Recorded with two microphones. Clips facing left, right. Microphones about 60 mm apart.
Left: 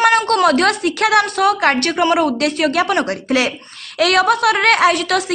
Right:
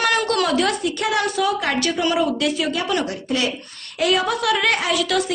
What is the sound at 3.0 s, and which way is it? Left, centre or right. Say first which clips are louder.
A woman's voice: left 5 dB; left.